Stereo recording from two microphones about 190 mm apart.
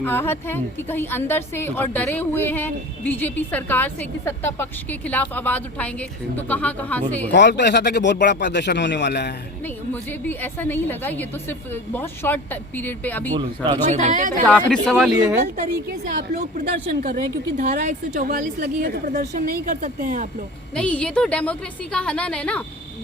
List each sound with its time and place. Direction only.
0.0 s a woman's voice: 10° left (ahead or behind)
7.3 s speech: 65° left (ahead or behind)
9.6 s a woman's voice: 10° left (ahead or behind)
13.3 s speech: 25° right (ahead or behind)
13.9 s a woman's voice: 40° right (ahead or behind)
14.4 s speech: 5° left (ahead or behind)
16.3 s a woman's voice: 45° right (ahead or behind)
20.7 s speech: 5° left (ahead or behind)